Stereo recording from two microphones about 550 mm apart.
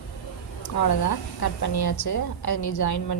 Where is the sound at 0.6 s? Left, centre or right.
Left.